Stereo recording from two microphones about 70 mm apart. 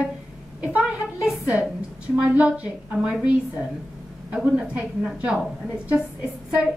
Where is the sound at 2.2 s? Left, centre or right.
Centre.